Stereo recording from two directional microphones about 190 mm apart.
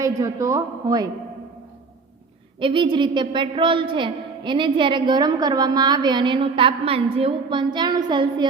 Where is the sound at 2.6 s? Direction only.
25° right (ahead or behind).